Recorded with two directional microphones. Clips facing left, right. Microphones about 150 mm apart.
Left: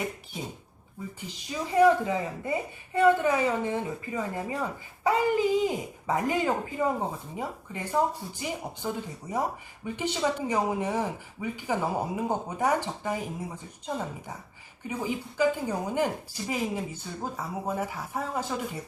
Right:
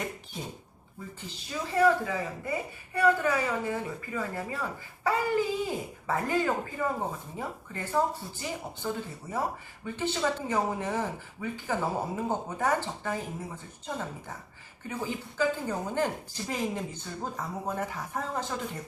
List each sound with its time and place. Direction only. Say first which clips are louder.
1.5 s a woman's voice: left 3 dB; 15° left (ahead or behind)
14.8 s speech: left 3 dB; 10° left (ahead or behind)